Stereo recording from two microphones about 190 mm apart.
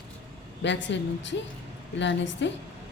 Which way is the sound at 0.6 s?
70° left (ahead or behind).